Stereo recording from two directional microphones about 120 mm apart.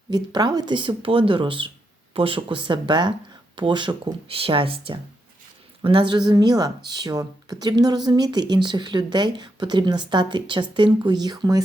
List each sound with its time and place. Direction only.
0.1 s speech: 35° right (ahead or behind)